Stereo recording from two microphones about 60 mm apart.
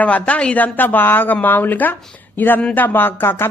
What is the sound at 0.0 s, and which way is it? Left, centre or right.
Speech, left.